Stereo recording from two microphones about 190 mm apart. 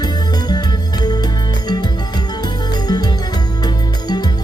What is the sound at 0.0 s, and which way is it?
Music, 20° left (ahead or behind).